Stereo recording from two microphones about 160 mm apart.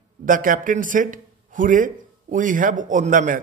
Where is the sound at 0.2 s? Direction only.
55° right (ahead or behind).